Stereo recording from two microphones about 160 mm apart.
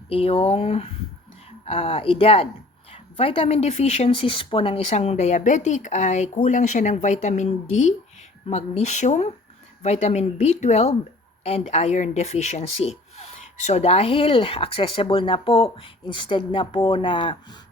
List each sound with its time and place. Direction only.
0.1 s a woman's voice: 40° left (ahead or behind)